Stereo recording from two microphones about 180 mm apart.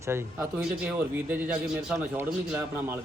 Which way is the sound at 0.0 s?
15° right (ahead or behind).